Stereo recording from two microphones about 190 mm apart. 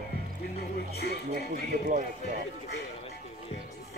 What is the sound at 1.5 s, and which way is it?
Speech, 45° right (ahead or behind).